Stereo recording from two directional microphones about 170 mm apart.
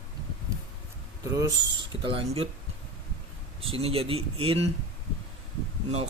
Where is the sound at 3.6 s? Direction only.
35° right (ahead or behind).